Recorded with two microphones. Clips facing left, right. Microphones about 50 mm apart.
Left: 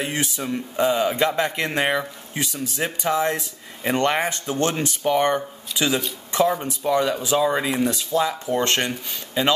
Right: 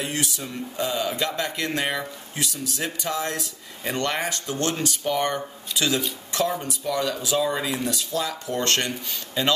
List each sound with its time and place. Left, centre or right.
0.0 s speech: left
6.7 s speech: left